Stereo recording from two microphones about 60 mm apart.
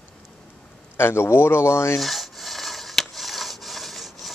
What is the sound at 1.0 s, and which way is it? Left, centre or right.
Speech, left.